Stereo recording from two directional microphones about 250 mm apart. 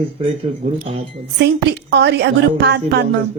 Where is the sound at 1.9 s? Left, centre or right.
Right.